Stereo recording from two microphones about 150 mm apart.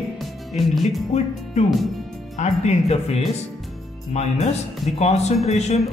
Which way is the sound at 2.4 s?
45° left (ahead or behind).